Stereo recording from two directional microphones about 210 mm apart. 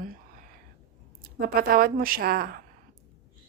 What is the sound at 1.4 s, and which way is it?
Speech, 45° right (ahead or behind).